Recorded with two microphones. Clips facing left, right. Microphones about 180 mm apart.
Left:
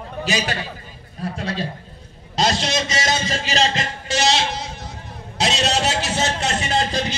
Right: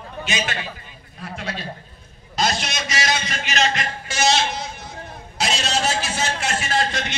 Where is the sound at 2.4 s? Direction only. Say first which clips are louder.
Left 3 dB; 30° left (ahead or behind).